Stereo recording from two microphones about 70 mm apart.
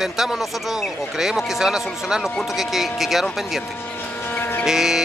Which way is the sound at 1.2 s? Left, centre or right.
Centre.